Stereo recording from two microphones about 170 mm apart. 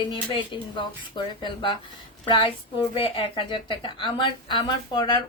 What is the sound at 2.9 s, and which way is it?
Speech, 30° left (ahead or behind).